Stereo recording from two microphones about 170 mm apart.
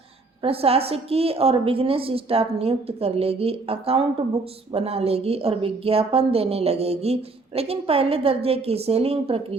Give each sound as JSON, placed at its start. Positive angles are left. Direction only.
{"t": 0.4, "sound": "a woman's voice", "side_deg": -35}